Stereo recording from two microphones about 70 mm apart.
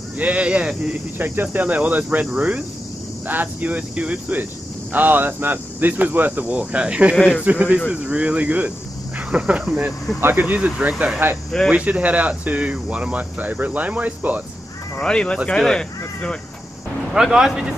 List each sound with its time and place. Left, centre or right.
0.2 s speech: centre
1.1 s speech: right; by 9.5 s centre
10.2 s speech: right
15.0 s speech: centre
17.1 s speech: centre